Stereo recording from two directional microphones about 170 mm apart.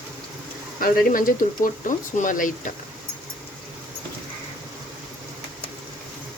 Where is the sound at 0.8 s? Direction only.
55° left (ahead or behind).